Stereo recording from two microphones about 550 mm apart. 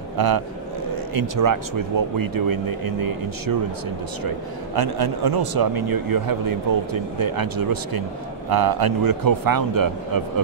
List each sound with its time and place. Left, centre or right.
0.2 s speech: right
4.7 s speech: right